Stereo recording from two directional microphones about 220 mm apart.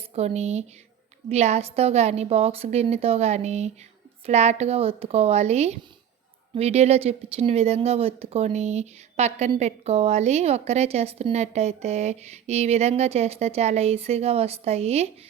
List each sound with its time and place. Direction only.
0.1 s a woman's voice: 30° right (ahead or behind)